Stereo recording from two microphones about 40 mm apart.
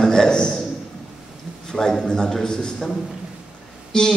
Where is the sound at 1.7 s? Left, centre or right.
Centre.